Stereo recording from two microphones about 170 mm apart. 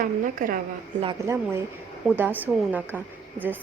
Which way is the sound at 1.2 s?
15° right (ahead or behind).